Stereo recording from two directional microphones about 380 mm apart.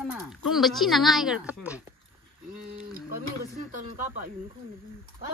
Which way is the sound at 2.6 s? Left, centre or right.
Right.